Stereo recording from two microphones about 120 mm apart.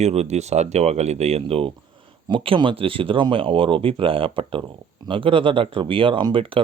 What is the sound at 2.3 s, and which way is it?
Speech, 45° right (ahead or behind).